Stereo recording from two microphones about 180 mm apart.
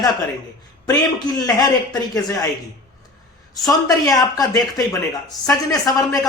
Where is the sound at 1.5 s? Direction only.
20° left (ahead or behind).